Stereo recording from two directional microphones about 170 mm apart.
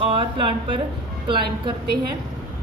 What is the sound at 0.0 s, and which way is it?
A woman's voice, 30° right (ahead or behind).